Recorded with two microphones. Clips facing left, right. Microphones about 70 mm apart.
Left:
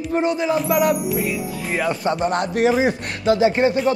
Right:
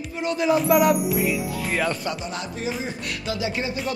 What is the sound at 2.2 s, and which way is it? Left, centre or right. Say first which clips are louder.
Speech: left 11 dB; left.